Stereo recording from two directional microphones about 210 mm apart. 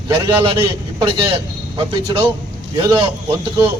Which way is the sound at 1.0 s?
25° right (ahead or behind).